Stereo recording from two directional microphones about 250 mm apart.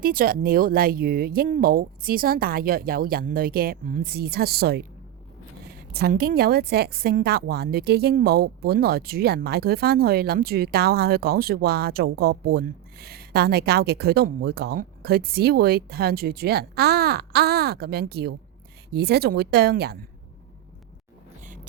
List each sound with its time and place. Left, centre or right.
0.0 s a woman's voice: right
5.9 s a woman's voice: right
21.4 s zipper: right